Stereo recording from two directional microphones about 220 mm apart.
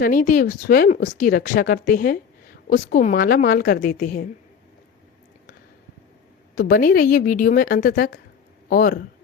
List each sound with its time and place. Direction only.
0.0 s a woman's voice: 40° left (ahead or behind)
6.6 s a woman's voice: 40° left (ahead or behind)